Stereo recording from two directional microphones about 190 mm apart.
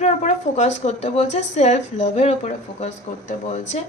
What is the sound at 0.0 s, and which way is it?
A woman's voice, 35° left (ahead or behind).